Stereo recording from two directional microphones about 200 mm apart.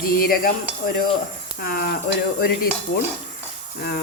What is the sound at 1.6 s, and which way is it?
Speech, 50° left (ahead or behind).